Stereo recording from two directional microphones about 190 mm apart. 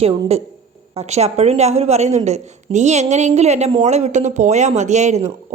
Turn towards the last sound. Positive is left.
turn(degrees=-35)  # may be behind; listen again after turning